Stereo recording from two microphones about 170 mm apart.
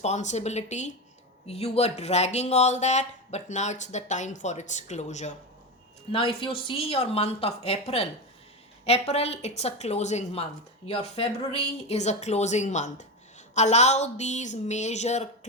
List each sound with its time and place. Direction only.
0.0 s a woman's voice: 40° left (ahead or behind)
6.1 s a woman's voice: 30° left (ahead or behind)